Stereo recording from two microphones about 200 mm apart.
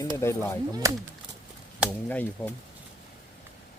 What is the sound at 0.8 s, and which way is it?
Speech, 15° right (ahead or behind).